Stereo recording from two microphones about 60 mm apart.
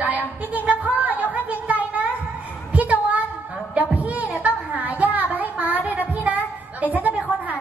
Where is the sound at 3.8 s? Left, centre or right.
Right.